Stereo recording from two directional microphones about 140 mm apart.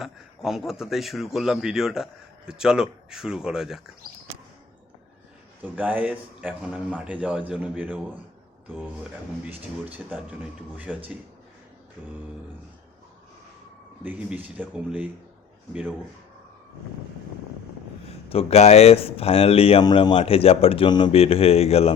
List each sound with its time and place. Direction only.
0.0 s a man's voice: centre (ahead or behind)
5.7 s a man's voice: 10° right (ahead or behind)
10.8 s a man's voice: 10° right (ahead or behind)
14.0 s a man's voice: 10° right (ahead or behind)
18.1 s speech: 45° left (ahead or behind)
19.8 s speech: 30° left (ahead or behind); by 21.9 s 45° left (ahead or behind)